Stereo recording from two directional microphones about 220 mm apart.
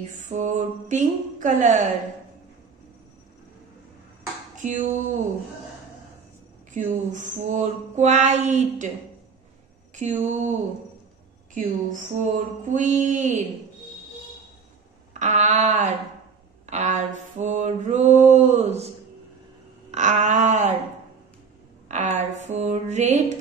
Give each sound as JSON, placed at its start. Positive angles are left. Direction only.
{"t": 0.2, "sound": "mantra", "side_deg": -35}
{"t": 4.6, "sound": "a sound", "side_deg": -35}
{"t": 6.7, "sound": "mantra", "side_deg": -35}
{"t": 9.9, "sound": "mantra", "side_deg": -35}
{"t": 15.1, "sound": "mantra", "side_deg": -35}
{"t": 19.9, "sound": "mantra", "side_deg": -35}
{"t": 21.8, "sound": "mantra", "side_deg": -30}